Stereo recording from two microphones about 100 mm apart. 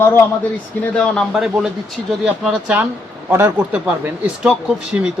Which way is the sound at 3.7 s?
10° right (ahead or behind).